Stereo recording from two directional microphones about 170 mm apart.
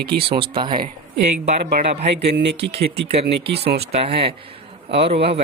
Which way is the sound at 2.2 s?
80° right.